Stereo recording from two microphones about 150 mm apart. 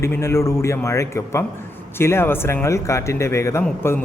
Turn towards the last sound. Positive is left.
turn(degrees=15)  # may be behind; listen again after turning